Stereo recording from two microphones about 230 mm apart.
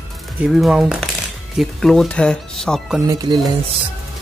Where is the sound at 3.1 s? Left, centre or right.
Centre.